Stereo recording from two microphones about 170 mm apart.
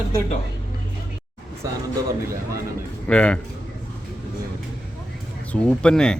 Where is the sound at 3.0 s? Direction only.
5° left (ahead or behind).